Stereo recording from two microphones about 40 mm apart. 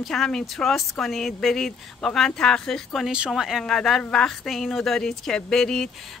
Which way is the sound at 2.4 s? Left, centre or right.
Centre.